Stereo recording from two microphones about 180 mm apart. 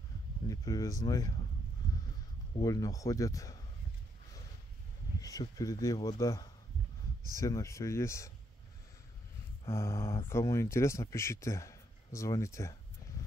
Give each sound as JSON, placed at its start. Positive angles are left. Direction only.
{"t": 0.5, "sound": "speech", "side_deg": 20}
{"t": 2.6, "sound": "speech", "side_deg": 20}
{"t": 5.2, "sound": "speech", "side_deg": 20}
{"t": 9.7, "sound": "speech", "side_deg": 15}